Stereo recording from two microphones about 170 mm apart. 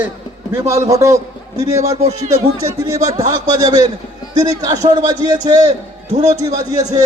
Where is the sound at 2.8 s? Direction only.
20° right (ahead or behind).